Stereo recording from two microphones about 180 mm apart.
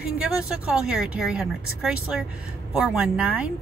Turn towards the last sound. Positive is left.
turn(degrees=-5)  # may be behind; listen again after turning